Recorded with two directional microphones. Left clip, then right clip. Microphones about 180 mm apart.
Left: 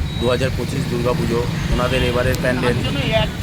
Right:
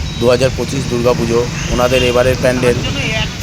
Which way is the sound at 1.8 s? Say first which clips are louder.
Right 8 dB; 40° right (ahead or behind).